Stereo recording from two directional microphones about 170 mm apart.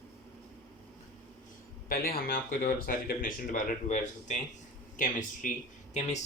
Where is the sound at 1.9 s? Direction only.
60° left (ahead or behind).